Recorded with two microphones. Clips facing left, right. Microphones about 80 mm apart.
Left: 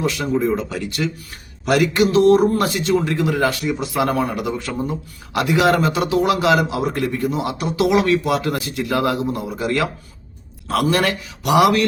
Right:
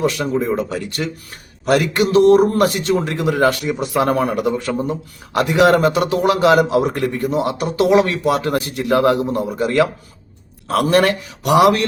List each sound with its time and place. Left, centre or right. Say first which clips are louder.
0.1 s speech: even; right
8.9 s speech: right 5 dB; right